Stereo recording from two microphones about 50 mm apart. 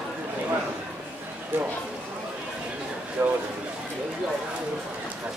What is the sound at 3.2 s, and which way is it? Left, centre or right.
Speech, right.